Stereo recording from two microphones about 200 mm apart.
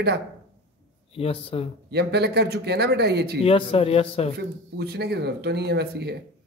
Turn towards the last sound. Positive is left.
turn(degrees=-55)  # may be behind; listen again after turning